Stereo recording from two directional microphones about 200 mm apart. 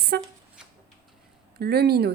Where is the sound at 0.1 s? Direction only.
55° right (ahead or behind).